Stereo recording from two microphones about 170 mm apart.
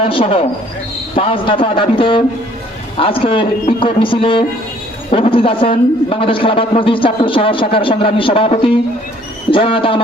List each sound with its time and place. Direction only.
0.0 s a woman's voice: 30° left (ahead or behind)